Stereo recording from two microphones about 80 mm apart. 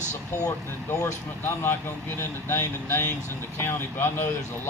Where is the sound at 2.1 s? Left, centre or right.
Left.